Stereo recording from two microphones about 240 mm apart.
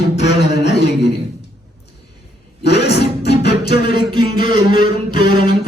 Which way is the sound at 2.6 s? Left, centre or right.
Left.